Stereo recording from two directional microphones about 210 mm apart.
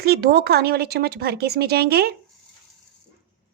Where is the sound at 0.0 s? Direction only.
50° right (ahead or behind).